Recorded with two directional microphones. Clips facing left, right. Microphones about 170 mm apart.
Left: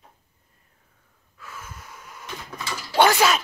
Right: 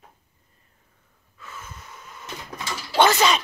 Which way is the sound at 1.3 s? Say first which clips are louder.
Even; 10° left (ahead or behind).